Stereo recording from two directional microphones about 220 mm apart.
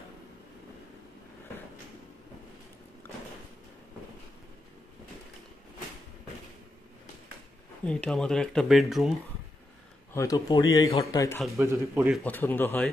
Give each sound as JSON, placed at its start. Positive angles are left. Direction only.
{"t": 7.8, "sound": "speech", "side_deg": 5}
{"t": 10.1, "sound": "speech", "side_deg": 15}
{"t": 11.5, "sound": "speech", "side_deg": -10}
{"t": 12.2, "sound": "speech", "side_deg": 10}